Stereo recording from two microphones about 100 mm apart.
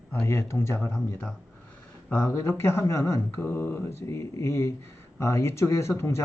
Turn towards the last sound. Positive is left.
turn(degrees=25)  # may be behind; listen again after turning